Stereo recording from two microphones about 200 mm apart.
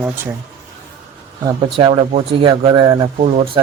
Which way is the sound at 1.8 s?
25° right (ahead or behind).